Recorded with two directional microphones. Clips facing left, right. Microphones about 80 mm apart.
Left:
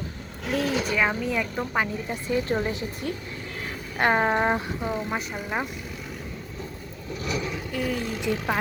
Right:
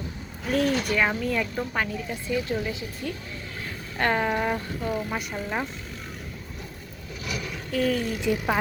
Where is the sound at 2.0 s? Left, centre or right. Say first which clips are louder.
Left 2 dB; left.